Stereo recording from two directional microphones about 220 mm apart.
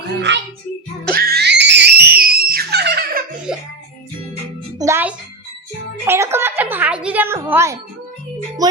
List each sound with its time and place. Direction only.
0.2 s music: 55° right (ahead or behind)
4.8 s music: 10° right (ahead or behind)
6.1 s a woman's voice: 10° right (ahead or behind)